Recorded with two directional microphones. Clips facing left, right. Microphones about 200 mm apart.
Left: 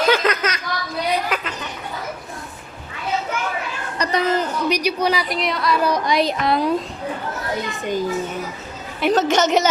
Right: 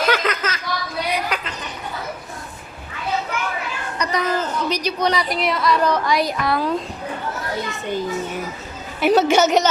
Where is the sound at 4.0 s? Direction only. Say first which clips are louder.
Left 2 dB; 30° left (ahead or behind).